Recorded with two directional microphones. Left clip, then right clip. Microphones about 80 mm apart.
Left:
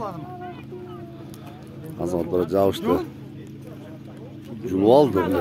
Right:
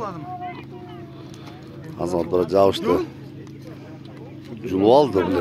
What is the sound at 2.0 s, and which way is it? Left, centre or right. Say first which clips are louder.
Speech: right 2 dB; left.